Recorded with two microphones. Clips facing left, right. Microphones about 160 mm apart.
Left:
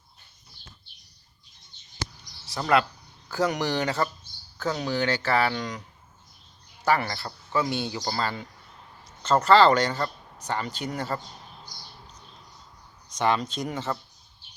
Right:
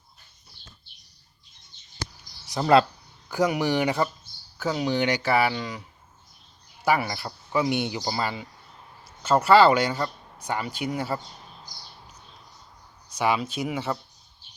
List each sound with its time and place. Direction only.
2.5 s speech: 25° right (ahead or behind)
3.2 s speech: 15° right (ahead or behind)
6.8 s speech: 10° right (ahead or behind)
13.1 s speech: 5° right (ahead or behind)